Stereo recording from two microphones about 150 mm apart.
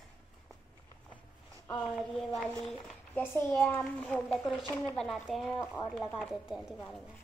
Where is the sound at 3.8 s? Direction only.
10° left (ahead or behind).